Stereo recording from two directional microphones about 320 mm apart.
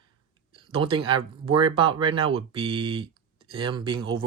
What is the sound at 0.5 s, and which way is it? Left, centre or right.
Speech, centre.